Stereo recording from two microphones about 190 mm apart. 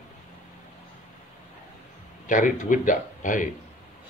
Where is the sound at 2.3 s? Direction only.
45° left (ahead or behind).